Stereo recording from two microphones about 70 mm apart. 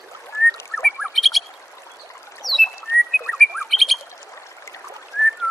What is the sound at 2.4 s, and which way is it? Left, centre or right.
Rodents, centre.